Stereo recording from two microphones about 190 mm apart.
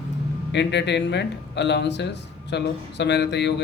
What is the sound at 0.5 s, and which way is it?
Speech, 65° left (ahead or behind).